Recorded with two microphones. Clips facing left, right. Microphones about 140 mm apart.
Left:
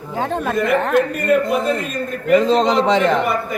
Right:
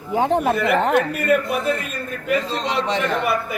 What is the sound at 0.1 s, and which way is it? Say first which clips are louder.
Speech: right 3 dB; 15° right (ahead or behind).